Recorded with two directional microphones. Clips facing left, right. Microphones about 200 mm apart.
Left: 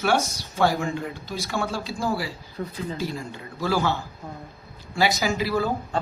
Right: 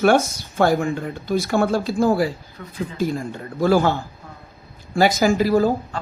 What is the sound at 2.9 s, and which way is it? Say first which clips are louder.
Speech: right 7 dB; 50° right (ahead or behind).